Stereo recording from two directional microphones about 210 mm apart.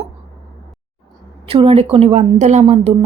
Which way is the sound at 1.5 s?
25° right (ahead or behind).